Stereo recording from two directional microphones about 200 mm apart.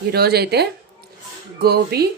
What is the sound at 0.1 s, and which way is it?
Speech, 50° right (ahead or behind).